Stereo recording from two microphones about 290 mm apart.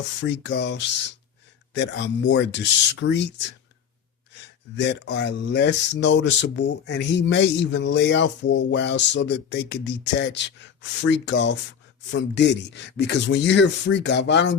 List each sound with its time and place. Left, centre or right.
0.2 s speech: left
4.8 s speech: left